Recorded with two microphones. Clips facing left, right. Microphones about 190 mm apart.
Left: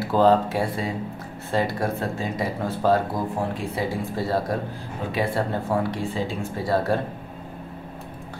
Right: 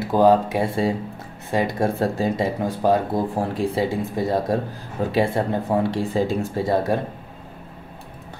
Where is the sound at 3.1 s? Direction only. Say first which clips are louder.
Right 3 dB; 30° right (ahead or behind).